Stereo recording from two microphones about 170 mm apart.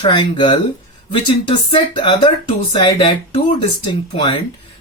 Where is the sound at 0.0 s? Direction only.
25° left (ahead or behind).